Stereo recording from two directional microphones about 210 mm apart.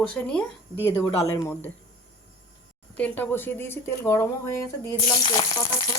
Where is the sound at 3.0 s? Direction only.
5° left (ahead or behind).